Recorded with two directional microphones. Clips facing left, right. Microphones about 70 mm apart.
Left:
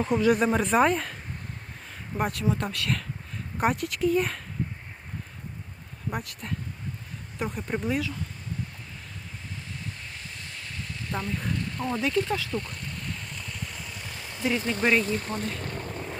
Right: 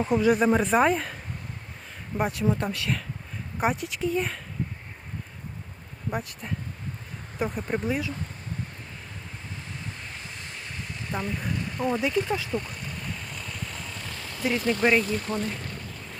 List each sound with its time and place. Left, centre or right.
0.0 s speech: centre
2.3 s speech: right
3.6 s speech: centre
6.1 s speech: centre
11.1 s a sound: centre
14.1 s vehicle: centre
14.5 s speech: left
15.0 s speech: left
15.6 s boat: left